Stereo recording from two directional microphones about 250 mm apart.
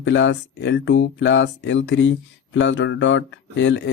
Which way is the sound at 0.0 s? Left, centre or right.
Left.